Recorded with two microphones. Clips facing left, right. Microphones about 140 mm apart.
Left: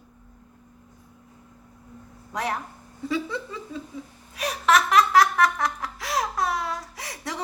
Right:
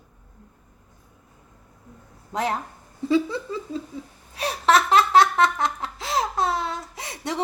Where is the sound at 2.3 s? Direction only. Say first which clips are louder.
Right 3 dB; 25° right (ahead or behind).